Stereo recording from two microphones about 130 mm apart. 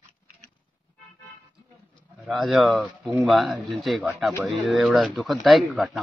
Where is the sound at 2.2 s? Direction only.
Centre (ahead or behind).